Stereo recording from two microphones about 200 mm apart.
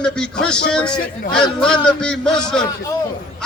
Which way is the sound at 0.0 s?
5° left (ahead or behind).